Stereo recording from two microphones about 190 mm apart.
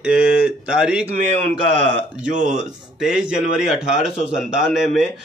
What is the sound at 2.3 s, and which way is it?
Speech, 40° right (ahead or behind).